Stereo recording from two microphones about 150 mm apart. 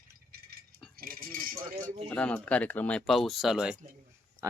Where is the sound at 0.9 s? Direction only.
75° right (ahead or behind).